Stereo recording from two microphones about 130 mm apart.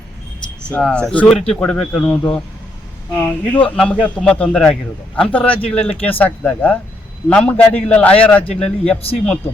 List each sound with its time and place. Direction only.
0.7 s a man's voice: 5° left (ahead or behind)
9.0 s speech: 50° left (ahead or behind)